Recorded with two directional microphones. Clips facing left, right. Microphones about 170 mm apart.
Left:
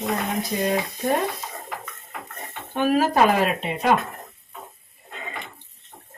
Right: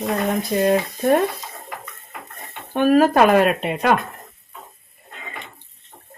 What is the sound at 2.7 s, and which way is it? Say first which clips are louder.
Speech: right 5 dB; 55° right (ahead or behind).